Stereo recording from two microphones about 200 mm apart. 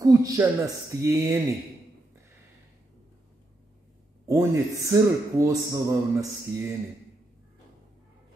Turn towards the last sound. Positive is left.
turn(degrees=-15)  # may be behind; listen again after turning